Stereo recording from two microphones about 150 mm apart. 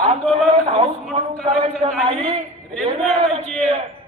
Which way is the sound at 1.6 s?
40° right (ahead or behind).